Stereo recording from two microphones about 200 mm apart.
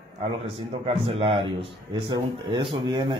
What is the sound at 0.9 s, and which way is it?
Speech, 30° right (ahead or behind).